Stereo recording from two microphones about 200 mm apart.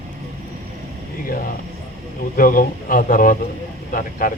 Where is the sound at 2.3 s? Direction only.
45° left (ahead or behind).